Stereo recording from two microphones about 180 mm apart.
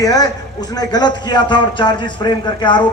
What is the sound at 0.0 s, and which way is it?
A man's voice, 20° left (ahead or behind).